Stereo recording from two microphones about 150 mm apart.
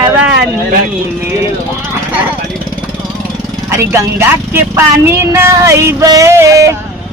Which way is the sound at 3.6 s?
20° right (ahead or behind).